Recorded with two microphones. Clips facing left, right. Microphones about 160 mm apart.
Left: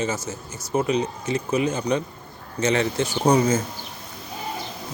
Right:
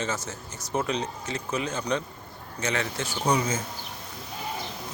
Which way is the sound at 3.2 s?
40° left (ahead or behind).